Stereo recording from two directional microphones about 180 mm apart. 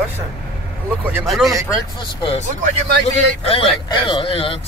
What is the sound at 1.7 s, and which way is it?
Speech, 25° left (ahead or behind).